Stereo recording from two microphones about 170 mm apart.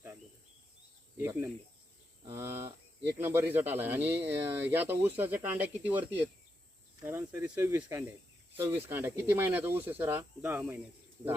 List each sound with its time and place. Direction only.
1.2 s speech: 15° right (ahead or behind)